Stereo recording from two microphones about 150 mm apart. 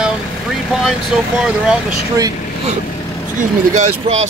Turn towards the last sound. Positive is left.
turn(degrees=-50)  # may be behind; listen again after turning